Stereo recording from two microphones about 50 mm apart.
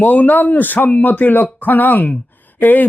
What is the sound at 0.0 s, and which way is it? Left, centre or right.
A woman's voice, left.